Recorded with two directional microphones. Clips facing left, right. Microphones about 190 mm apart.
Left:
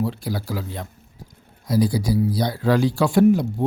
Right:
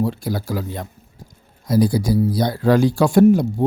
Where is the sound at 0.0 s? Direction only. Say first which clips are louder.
Right 3 dB; 50° right (ahead or behind).